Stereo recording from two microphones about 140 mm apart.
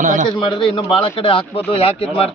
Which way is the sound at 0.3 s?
35° left (ahead or behind).